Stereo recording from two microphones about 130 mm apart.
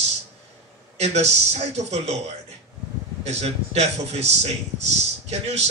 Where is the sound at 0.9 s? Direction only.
55° right (ahead or behind).